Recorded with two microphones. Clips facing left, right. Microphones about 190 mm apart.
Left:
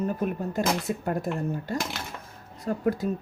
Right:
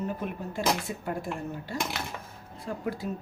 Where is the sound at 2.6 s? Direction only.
45° left (ahead or behind).